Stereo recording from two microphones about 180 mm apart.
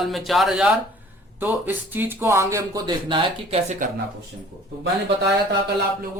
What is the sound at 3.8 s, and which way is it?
Speech, 50° right (ahead or behind).